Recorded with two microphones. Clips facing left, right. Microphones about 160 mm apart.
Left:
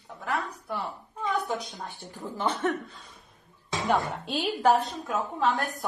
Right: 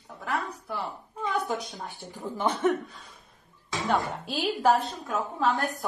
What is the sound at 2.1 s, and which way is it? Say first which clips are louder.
Speech: right 1 dB; 15° right (ahead or behind).